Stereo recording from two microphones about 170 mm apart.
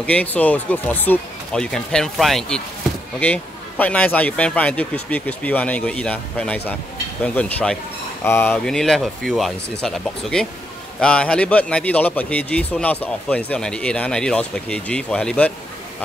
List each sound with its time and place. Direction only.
0.0 s speech: 10° left (ahead or behind)